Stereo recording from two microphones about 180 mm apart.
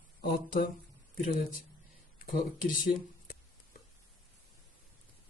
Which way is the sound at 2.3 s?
50° left (ahead or behind).